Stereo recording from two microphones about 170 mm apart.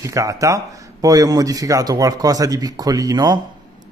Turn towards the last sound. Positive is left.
turn(degrees=-25)  # may be behind; listen again after turning